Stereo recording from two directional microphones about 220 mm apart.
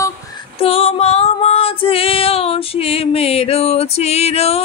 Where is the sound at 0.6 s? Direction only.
25° left (ahead or behind).